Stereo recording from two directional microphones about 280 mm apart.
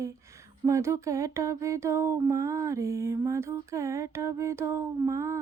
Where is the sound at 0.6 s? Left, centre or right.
Centre.